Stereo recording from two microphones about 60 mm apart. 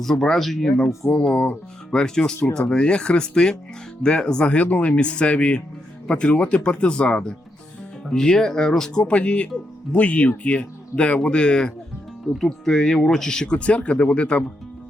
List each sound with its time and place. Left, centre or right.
0.0 s speech: centre